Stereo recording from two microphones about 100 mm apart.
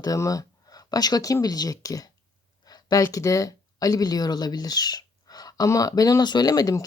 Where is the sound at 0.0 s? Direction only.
35° left (ahead or behind).